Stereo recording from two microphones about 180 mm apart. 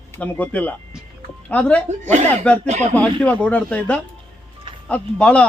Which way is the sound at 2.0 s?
40° right (ahead or behind).